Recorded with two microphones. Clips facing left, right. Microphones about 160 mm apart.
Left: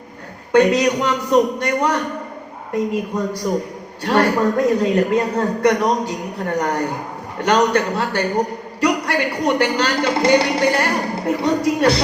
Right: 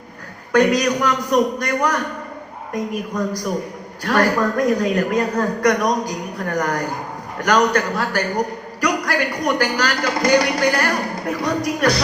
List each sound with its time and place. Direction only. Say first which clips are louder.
0.5 s a man's voice: left 2 dB; 25° left (ahead or behind)